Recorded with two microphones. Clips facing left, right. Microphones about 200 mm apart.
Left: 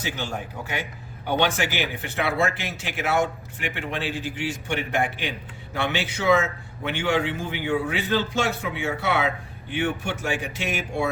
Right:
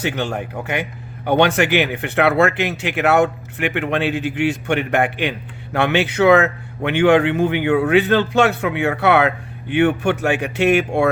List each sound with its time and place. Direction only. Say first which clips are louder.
0.0 s a man's voice: right 8 dB; 65° right (ahead or behind)